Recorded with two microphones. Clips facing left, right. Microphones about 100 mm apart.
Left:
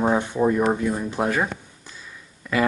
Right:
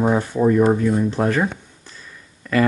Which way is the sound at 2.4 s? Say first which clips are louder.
Right 4 dB; 15° left (ahead or behind).